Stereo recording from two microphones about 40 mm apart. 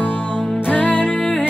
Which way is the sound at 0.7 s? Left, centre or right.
Left.